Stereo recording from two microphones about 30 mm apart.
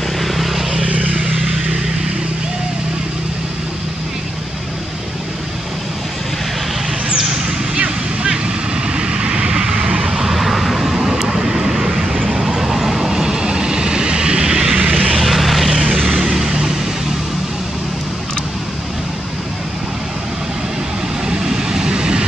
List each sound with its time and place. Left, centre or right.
0.2 s vehicle: centre
0.8 s vehicle: right
1.3 s vehicle: centre
7.2 s a sound: centre
7.7 s vehicle: right
10.1 s vehicle: centre
14.9 s vehicle: right
15.1 s vehicle: centre
15.7 s vehicle: centre
21.3 s vehicle: right